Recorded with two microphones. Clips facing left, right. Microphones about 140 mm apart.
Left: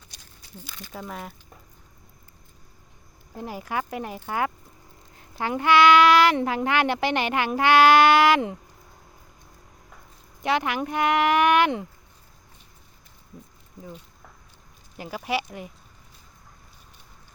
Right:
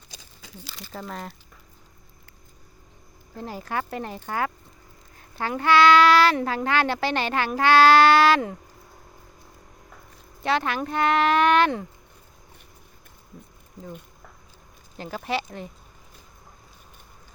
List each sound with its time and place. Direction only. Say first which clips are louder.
0.9 s speech: right 1 dB; 5° left (ahead or behind)
3.3 s speech: even; 15° left (ahead or behind)
10.4 s speech: even; 15° left (ahead or behind)
14.9 s speech: even; 10° left (ahead or behind)